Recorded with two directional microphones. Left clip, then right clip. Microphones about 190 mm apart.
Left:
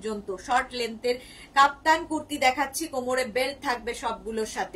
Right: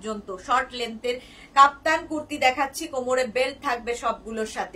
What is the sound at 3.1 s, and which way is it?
A woman's voice, 15° right (ahead or behind).